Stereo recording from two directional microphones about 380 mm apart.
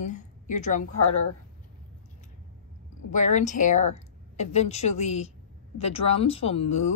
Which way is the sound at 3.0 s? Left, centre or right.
Centre.